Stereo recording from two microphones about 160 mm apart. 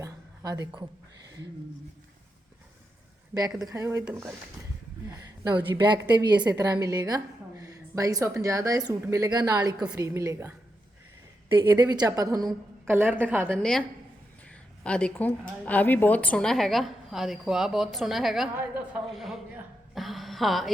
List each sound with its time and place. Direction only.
0.0 s a sound: 20° right (ahead or behind)
3.6 s a woman's voice: 20° right (ahead or behind)
5.0 s a woman's voice: 20° right (ahead or behind)
11.5 s a woman's voice: 25° right (ahead or behind)
12.9 s a woman's voice: 10° right (ahead or behind)
13.6 s a woman's voice: 5° left (ahead or behind)
14.8 s a woman's voice: 5° left (ahead or behind)
19.9 s a sound: centre (ahead or behind)